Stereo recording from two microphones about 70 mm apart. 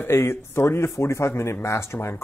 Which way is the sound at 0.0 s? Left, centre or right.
Left.